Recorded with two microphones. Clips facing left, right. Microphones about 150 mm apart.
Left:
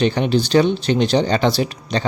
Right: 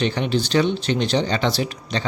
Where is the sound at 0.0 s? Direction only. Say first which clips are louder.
Left 4 dB; 40° left (ahead or behind).